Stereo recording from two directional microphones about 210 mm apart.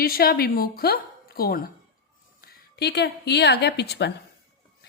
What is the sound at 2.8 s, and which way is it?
Speech, 50° left (ahead or behind).